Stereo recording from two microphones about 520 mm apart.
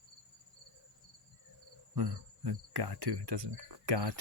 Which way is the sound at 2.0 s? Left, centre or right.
Right.